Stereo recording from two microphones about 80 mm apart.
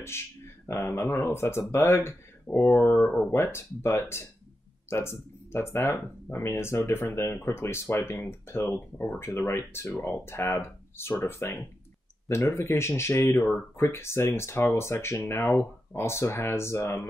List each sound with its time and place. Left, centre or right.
0.7 s speech: left
3.3 s speech: left